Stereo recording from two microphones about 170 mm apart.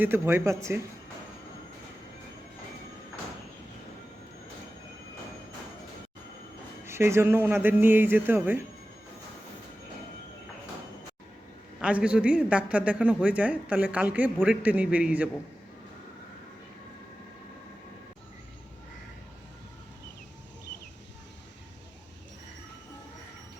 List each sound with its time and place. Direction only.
0.0 s speech: 15° right (ahead or behind)
6.8 s speech: 15° right (ahead or behind)
11.8 s speech: 5° right (ahead or behind)